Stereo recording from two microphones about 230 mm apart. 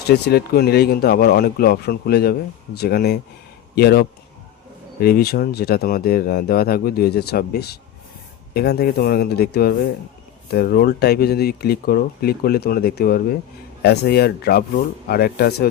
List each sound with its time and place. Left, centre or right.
0.3 s speech: left